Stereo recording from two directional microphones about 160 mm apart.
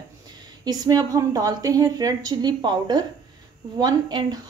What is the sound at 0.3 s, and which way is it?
A woman's voice, 25° right (ahead or behind).